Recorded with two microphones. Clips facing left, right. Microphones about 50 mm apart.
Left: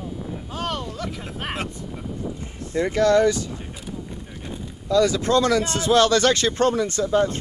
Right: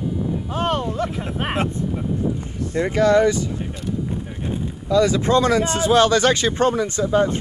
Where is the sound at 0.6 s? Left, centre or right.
Right.